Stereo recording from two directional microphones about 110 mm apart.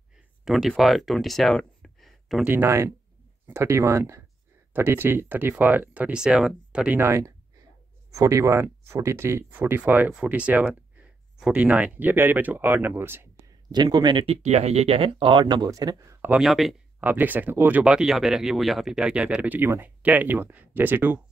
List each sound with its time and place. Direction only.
0.5 s speech: centre (ahead or behind)
2.4 s speech: 20° right (ahead or behind)
7.0 s speech: 25° right (ahead or behind)
13.7 s speech: 40° right (ahead or behind)
14.2 s speech: 80° right; by 16.2 s 35° right (ahead or behind)
16.3 s speech: centre (ahead or behind)
17.0 s speech: 15° right (ahead or behind)